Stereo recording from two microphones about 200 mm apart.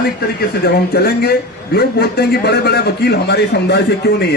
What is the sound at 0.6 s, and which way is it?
A man's voice, 50° left (ahead or behind).